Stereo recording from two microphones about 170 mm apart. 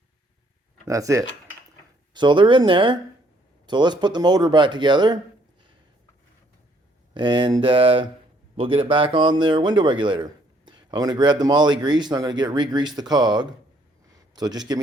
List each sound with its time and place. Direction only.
0.9 s speech: 20° right (ahead or behind)
7.1 s speech: 25° right (ahead or behind)